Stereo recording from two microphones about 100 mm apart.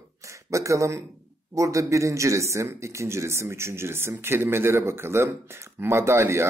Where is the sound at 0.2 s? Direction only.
30° right (ahead or behind).